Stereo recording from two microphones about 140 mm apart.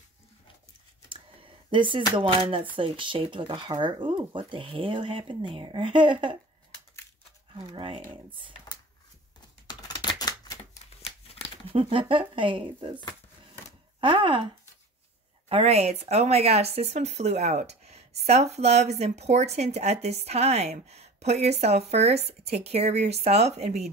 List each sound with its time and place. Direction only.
1.0 s a sound: 40° right (ahead or behind)
2.1 s speech: 40° right (ahead or behind)
7.6 s speech: 35° right (ahead or behind)
9.7 s a sound: 30° left (ahead or behind)
11.0 s scissors: 50° left (ahead or behind)
11.7 s speech: 40° right (ahead or behind)
14.0 s speech: 35° right (ahead or behind)
15.4 s speech: 45° right (ahead or behind)